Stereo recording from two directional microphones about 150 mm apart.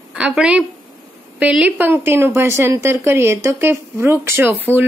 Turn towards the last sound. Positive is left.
turn(degrees=-15)  # may be behind; listen again after turning